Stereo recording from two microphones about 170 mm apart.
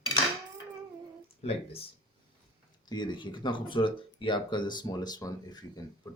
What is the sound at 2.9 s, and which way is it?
Speech, 25° left (ahead or behind).